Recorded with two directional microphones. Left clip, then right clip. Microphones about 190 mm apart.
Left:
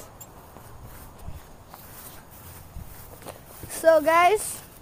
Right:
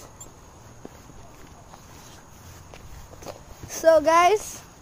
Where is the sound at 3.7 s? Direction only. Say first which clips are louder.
Right 1 dB; centre (ahead or behind).